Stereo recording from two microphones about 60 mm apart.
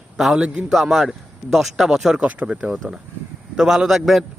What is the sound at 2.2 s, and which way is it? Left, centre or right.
Speech, right.